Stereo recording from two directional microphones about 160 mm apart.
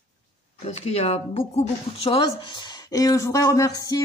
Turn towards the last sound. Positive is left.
turn(degrees=25)  # may be behind; listen again after turning